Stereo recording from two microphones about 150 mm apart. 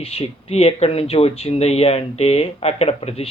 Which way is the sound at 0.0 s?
40° left (ahead or behind).